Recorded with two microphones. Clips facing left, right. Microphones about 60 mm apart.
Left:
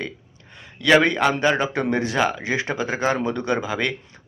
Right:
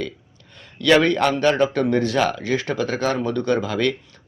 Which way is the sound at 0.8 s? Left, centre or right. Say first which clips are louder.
Right 1 dB; centre.